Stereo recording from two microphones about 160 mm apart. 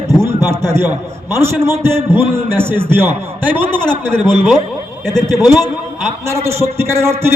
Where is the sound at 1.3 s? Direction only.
15° right (ahead or behind).